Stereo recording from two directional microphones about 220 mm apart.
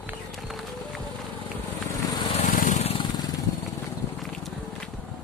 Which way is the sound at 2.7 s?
25° left (ahead or behind).